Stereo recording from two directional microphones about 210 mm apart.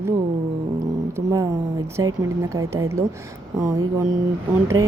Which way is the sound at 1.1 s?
15° right (ahead or behind).